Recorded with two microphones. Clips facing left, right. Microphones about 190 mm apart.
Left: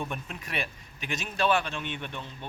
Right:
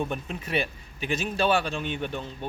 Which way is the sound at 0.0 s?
35° right (ahead or behind).